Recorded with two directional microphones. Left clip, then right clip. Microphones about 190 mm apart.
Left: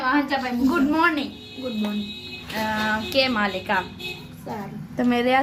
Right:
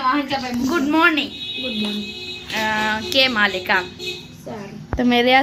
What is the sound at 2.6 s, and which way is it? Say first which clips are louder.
Speech: right 4 dB; 10° right (ahead or behind).